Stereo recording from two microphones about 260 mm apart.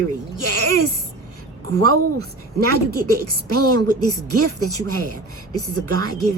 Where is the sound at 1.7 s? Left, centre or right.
Right.